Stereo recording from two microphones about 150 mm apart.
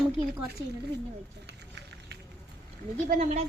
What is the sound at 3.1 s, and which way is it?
Speech, 50° right (ahead or behind).